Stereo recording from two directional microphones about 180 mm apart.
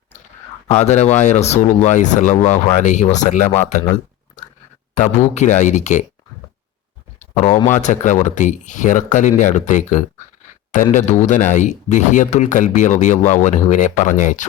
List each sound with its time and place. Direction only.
0.7 s speech: 40° left (ahead or behind)
4.9 s speech: 40° left (ahead or behind)
7.3 s speech: 40° left (ahead or behind)